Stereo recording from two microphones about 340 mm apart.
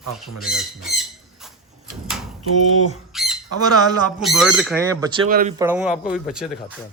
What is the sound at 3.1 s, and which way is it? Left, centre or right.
Squawk, centre.